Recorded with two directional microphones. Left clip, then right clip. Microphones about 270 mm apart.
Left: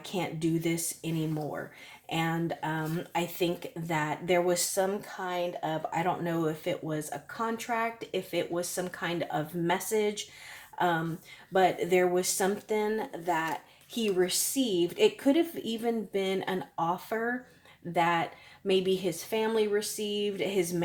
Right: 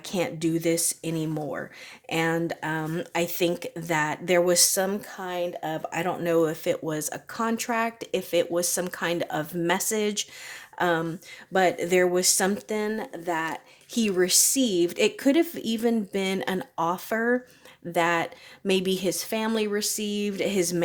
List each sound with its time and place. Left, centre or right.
0.0 s speech: right